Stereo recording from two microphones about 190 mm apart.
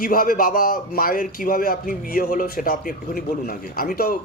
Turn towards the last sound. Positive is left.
turn(degrees=50)  # may be behind; listen again after turning